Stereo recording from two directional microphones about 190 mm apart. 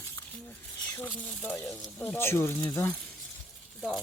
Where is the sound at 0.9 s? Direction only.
10° left (ahead or behind).